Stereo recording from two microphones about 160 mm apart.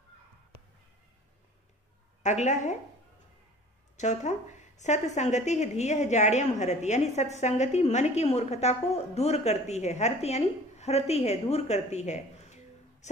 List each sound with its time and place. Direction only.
2.2 s speech: 45° left (ahead or behind)
3.9 s speech: 50° left (ahead or behind)